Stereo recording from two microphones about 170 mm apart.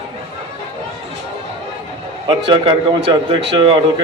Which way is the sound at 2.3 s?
30° right (ahead or behind).